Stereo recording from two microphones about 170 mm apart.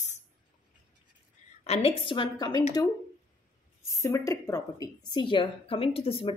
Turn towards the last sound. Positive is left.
turn(degrees=35)  # may be behind; listen again after turning